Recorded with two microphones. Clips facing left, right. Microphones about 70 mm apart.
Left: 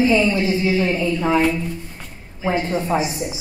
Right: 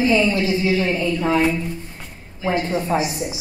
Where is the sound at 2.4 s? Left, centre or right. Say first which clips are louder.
Even; centre.